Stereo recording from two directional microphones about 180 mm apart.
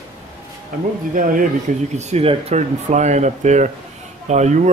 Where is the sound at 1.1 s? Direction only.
50° right (ahead or behind).